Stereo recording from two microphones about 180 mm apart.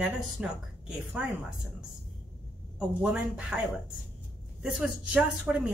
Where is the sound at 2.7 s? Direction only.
5° right (ahead or behind).